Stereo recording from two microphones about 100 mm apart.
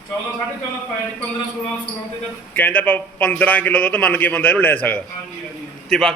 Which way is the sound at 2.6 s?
15° left (ahead or behind).